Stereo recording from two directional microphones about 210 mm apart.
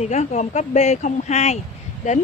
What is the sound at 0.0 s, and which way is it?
Speech, 35° left (ahead or behind).